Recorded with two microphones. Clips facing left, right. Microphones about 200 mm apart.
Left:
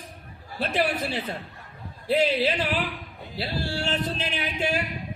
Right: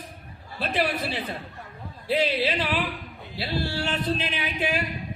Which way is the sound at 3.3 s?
45° left (ahead or behind).